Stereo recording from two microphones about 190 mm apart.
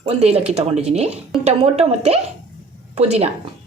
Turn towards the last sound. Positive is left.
turn(degrees=-35)  # may be behind; listen again after turning